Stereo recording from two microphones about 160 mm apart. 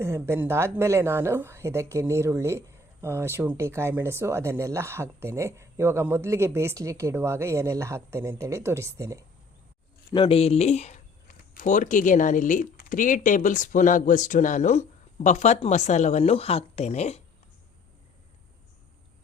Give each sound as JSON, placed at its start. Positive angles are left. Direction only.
{"t": 0.0, "sound": "a woman's voice", "side_deg": -15}
{"t": 10.2, "sound": "speech", "side_deg": 40}